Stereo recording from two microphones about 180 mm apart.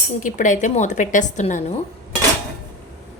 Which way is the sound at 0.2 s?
45° left (ahead or behind).